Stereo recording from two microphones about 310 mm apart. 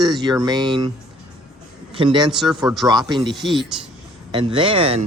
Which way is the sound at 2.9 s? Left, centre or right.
Centre.